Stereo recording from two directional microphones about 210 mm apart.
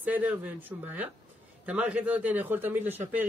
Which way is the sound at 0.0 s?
10° right (ahead or behind).